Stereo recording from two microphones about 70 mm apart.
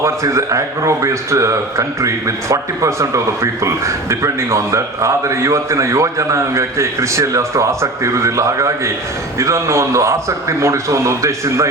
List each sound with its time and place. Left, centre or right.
0.0 s speech: right